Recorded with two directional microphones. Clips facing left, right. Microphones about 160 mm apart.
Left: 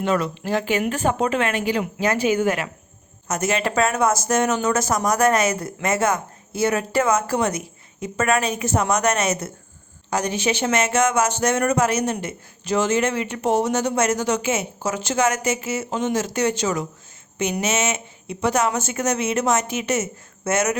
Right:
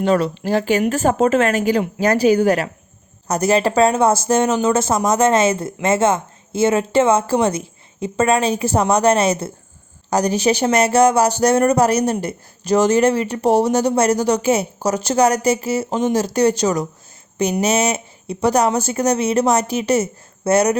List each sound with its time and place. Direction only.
0.0 s speech: 35° right (ahead or behind)